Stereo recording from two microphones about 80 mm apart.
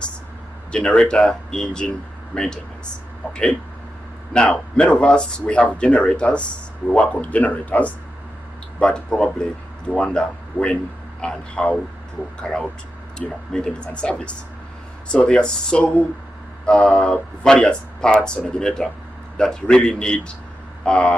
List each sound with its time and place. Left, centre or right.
0.7 s speech: centre
4.3 s a man's voice: centre
13.5 s speech: centre